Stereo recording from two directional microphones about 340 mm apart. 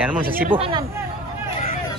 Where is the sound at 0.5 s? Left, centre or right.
Centre.